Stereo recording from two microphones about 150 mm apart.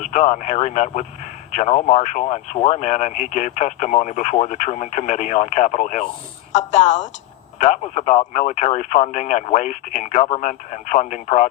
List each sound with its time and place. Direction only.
0.0 s speech: 55° left (ahead or behind)